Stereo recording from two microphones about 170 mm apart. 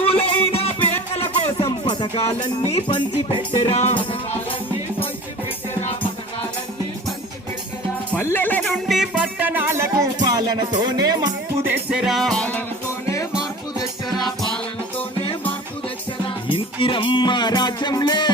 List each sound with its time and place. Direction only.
0.0 s music: 35° left (ahead or behind)
8.1 s music: 10° left (ahead or behind); by 11.3 s 25° right (ahead or behind)
11.6 s music: 10° right (ahead or behind); by 12.6 s 5° left (ahead or behind)
14.3 s music: 5° left (ahead or behind)
16.5 s music: 30° left (ahead or behind)